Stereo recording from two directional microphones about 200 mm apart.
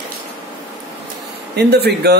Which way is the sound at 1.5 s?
55° right (ahead or behind).